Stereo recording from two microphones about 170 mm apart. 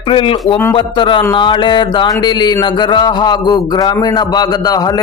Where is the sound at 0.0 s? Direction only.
30° left (ahead or behind).